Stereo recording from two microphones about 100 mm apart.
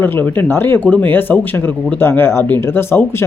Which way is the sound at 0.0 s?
20° left (ahead or behind).